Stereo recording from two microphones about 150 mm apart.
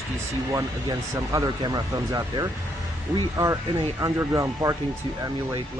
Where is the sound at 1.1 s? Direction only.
25° right (ahead or behind).